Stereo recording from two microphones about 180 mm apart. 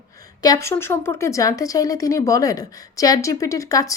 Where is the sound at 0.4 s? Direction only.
20° left (ahead or behind).